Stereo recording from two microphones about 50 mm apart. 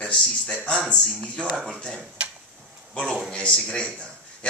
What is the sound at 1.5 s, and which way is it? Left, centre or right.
Speech, centre.